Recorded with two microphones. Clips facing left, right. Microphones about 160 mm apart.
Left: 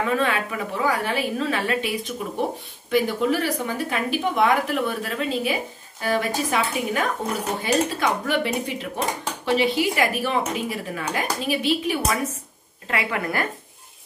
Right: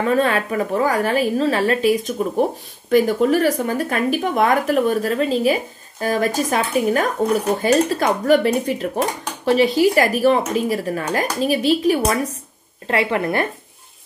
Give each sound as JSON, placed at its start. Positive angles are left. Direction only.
{"t": 0.0, "sound": "speech", "side_deg": -40}